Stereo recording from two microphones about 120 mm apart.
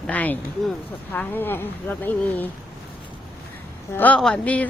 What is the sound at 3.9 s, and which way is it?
Speech, 15° left (ahead or behind).